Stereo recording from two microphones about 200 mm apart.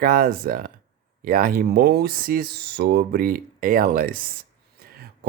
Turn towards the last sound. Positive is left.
turn(degrees=-50)  # may be behind; listen again after turning